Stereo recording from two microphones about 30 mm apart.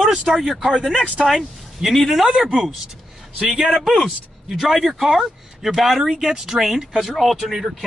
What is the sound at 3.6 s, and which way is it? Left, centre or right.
Speech, centre.